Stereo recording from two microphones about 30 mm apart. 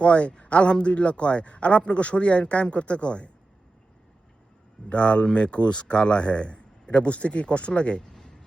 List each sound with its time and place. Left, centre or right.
0.0 s speech: left
4.9 s speech: left
8.0 s a sound: centre